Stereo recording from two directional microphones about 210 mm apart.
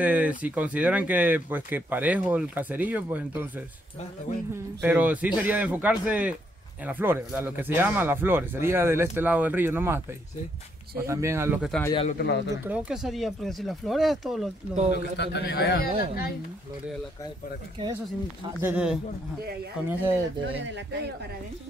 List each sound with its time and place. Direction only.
0.0 s speech: 5° right (ahead or behind)
4.8 s speech: 10° right (ahead or behind)
12.2 s speech: 55° left (ahead or behind)
12.6 s speech: 5° right (ahead or behind)
14.9 s speech: 55° left (ahead or behind)
18.6 s speech: 5° right (ahead or behind)
20.4 s speech: 60° right (ahead or behind)